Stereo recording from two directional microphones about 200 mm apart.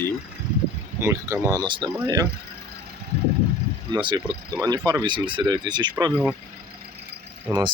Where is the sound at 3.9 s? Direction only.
20° right (ahead or behind).